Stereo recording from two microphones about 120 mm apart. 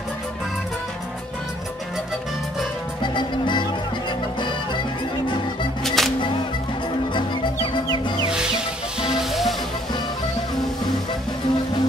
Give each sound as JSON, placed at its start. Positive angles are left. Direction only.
{"t": 3.0, "sound": "music", "side_deg": 40}
{"t": 5.9, "sound": "music", "side_deg": 0}
{"t": 7.7, "sound": "music", "side_deg": 35}
{"t": 9.0, "sound": "music", "side_deg": 0}